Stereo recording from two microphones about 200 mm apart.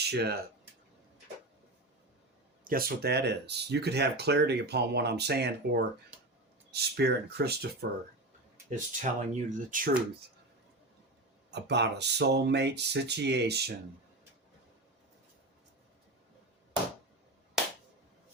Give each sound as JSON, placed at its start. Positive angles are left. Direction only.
{"t": 0.0, "sound": "speech", "side_deg": -55}
{"t": 2.6, "sound": "speech", "side_deg": -50}
{"t": 8.7, "sound": "speech", "side_deg": -35}
{"t": 11.5, "sound": "speech", "side_deg": -60}